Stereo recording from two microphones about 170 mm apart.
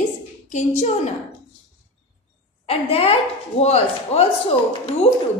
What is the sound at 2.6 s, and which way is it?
Speech, 35° left (ahead or behind).